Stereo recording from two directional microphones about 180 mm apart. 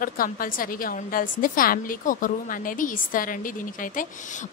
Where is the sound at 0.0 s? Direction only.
50° left (ahead or behind).